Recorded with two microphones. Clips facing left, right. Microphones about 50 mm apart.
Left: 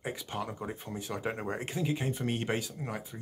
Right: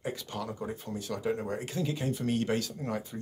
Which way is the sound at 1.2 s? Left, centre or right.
Left.